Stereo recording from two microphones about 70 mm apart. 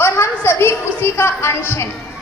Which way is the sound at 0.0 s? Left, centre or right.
Left.